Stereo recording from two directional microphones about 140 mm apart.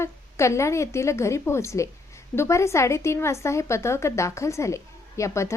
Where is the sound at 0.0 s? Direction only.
20° left (ahead or behind).